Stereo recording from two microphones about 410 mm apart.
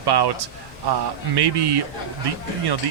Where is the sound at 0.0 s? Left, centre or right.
Right.